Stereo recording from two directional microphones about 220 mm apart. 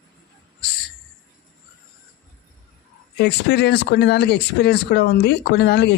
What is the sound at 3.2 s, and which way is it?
Speech, 50° left (ahead or behind).